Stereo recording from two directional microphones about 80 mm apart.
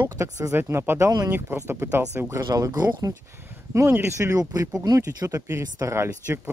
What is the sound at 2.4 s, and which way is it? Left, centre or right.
Speech, right.